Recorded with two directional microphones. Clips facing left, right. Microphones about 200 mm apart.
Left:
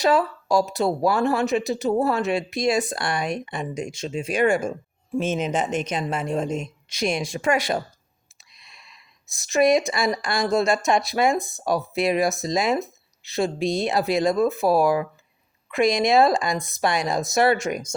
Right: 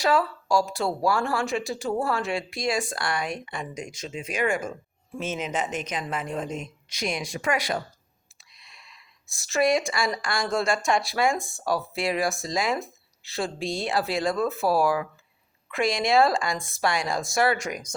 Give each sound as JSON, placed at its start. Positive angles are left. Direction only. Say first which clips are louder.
{"t": 0.0, "sound": "speech", "louder": "left 3 dB", "side_deg": 20}
{"t": 5.7, "sound": "speech", "louder": "left 5 dB", "side_deg": 30}